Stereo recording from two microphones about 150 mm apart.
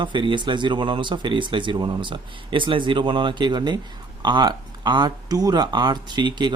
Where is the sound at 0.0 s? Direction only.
35° right (ahead or behind).